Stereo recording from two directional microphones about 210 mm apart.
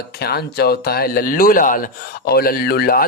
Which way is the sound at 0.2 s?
50° left (ahead or behind).